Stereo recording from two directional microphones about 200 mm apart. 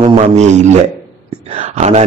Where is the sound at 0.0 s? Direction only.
35° right (ahead or behind).